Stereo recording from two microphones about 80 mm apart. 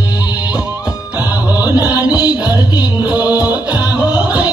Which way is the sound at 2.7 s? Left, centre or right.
Left.